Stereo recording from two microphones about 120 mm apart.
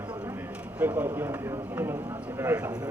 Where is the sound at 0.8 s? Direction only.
15° right (ahead or behind).